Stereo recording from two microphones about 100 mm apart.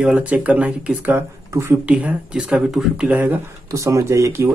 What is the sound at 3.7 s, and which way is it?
Speech, 30° right (ahead or behind).